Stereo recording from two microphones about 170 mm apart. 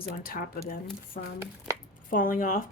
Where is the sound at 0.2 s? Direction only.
55° left (ahead or behind).